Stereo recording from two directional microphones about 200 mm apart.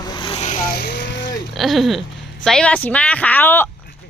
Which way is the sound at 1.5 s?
Centre (ahead or behind).